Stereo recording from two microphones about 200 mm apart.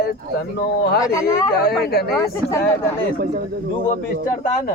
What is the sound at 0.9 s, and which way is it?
Speech, 15° left (ahead or behind).